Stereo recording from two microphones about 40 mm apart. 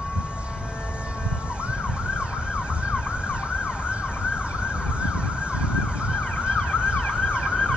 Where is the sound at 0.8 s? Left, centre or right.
Right.